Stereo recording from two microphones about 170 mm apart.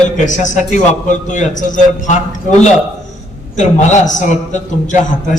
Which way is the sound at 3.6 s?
45° left (ahead or behind).